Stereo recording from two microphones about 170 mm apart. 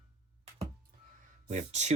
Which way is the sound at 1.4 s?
40° right (ahead or behind).